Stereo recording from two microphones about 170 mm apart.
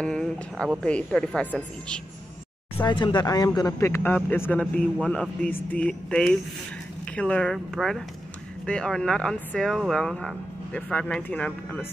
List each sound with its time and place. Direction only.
0.0 s a sound: 5° left (ahead or behind)
0.8 s speech: 5° left (ahead or behind)
2.8 s speech: 25° left (ahead or behind); by 11.8 s 10° left (ahead or behind)